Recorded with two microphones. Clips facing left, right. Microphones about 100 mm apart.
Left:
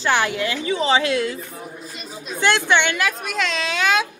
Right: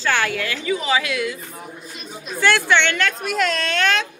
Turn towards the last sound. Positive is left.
turn(degrees=5)  # may be behind; listen again after turning